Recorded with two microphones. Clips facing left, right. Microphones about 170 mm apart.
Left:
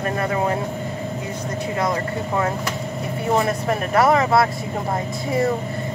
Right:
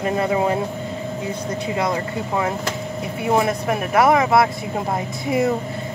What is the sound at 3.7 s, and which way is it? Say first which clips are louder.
Speech: even; 10° right (ahead or behind).